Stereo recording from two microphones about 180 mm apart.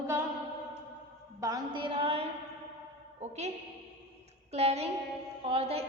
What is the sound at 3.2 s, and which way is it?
Music, 40° right (ahead or behind).